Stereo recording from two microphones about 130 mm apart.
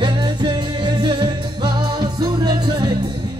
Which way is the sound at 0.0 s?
35° right (ahead or behind).